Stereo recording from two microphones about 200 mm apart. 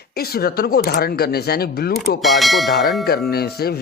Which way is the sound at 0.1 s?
50° left (ahead or behind).